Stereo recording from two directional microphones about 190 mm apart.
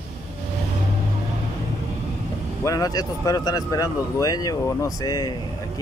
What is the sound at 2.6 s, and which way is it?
Speech, 20° left (ahead or behind).